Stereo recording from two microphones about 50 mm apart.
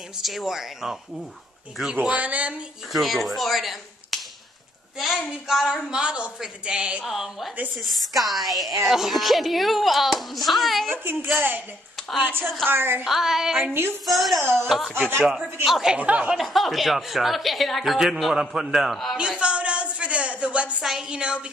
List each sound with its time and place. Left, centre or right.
0.2 s speech: centre
2.0 s speech: right
2.9 s speech: centre
5.9 s speech: centre
7.1 s speech: centre
11.3 s a woman's voice: right
13.0 s a woman's voice: centre
14.4 s a woman's voice: right
15.6 s speech: centre
16.0 s speech: right
16.3 s speech: centre
19.1 s a sound: right
21.1 s speech: right